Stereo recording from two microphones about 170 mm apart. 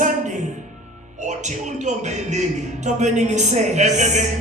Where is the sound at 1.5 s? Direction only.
45° right (ahead or behind).